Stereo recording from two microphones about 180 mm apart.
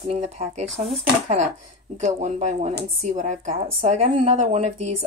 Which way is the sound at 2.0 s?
40° right (ahead or behind).